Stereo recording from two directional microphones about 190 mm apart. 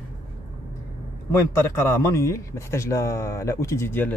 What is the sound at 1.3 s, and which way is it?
A man's voice, 15° left (ahead or behind).